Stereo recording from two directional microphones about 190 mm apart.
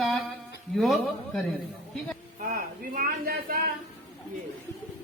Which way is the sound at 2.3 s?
45° right (ahead or behind).